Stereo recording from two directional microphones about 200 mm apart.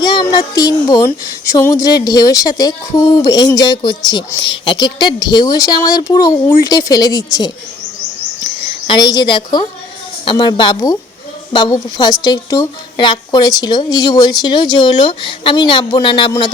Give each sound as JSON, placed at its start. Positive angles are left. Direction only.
{"t": 0.0, "sound": "speech", "side_deg": 20}
{"t": 8.9, "sound": "speech", "side_deg": 20}